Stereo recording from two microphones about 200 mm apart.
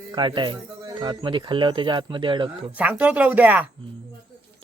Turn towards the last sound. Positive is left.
turn(degrees=-10)  # may be behind; listen again after turning